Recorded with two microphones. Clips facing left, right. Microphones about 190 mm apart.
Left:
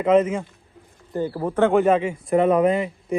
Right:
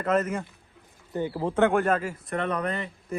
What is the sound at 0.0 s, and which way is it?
Speech, 10° left (ahead or behind).